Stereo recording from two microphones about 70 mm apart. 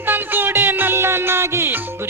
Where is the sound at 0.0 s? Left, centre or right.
Right.